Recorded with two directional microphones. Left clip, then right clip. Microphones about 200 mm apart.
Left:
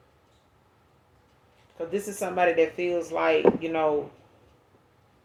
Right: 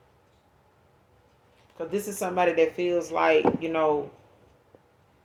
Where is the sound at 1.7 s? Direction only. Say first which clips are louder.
Even; 35° right (ahead or behind).